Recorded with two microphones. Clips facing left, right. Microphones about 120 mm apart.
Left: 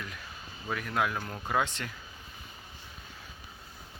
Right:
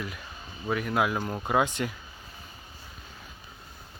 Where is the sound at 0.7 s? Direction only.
5° right (ahead or behind).